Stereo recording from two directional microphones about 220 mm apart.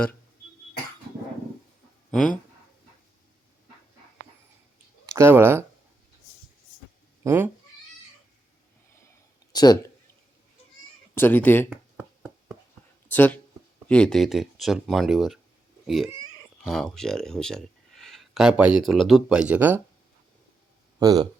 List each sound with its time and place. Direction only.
2.0 s speech: 5° left (ahead or behind)
5.1 s speech: 10° right (ahead or behind)
7.3 s speech: 10° right (ahead or behind)
9.5 s a sound: 20° left (ahead or behind)
11.1 s speech: 10° left (ahead or behind)
11.7 s a sound: 5° right (ahead or behind)
13.1 s speech: 10° left (ahead or behind)
16.6 s speech: centre (ahead or behind)
21.0 s speech: 15° right (ahead or behind)